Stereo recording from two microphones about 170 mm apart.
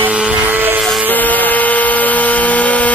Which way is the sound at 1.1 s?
10° left (ahead or behind).